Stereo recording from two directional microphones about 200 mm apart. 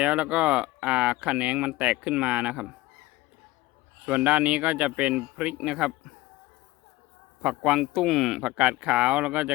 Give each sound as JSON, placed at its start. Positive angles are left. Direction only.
{"t": 0.0, "sound": "speech", "side_deg": -5}
{"t": 4.0, "sound": "speech", "side_deg": -5}
{"t": 7.4, "sound": "speech", "side_deg": -5}